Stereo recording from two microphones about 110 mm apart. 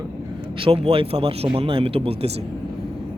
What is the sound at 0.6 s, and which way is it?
Speech, 60° right (ahead or behind).